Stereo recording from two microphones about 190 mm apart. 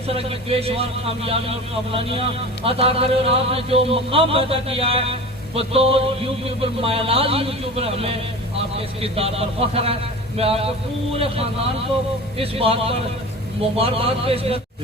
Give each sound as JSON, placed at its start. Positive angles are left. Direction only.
{"t": 0.1, "sound": "a man's voice", "side_deg": -30}